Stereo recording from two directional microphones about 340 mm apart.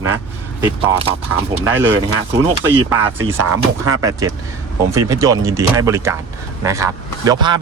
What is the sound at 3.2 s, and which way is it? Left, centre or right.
Speech, right.